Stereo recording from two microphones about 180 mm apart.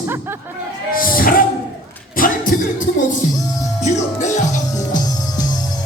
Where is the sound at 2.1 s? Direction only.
50° left (ahead or behind).